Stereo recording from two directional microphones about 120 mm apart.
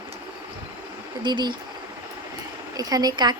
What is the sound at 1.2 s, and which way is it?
Speech, 40° right (ahead or behind).